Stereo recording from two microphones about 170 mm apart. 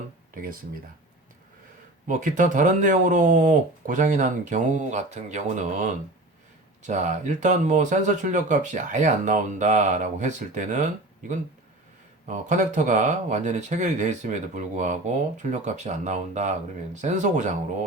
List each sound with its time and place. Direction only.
2.0 s speech: 50° right (ahead or behind)
12.3 s speech: 45° right (ahead or behind)